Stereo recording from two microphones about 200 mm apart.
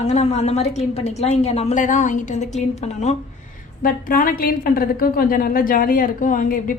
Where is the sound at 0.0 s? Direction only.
35° left (ahead or behind).